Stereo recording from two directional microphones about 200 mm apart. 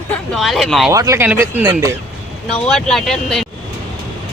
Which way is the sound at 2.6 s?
Centre (ahead or behind).